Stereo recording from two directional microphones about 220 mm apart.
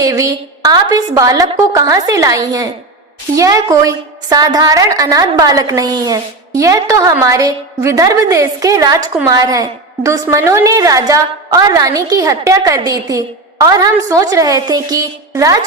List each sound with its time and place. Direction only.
0.0 s a woman's voice: 15° right (ahead or behind)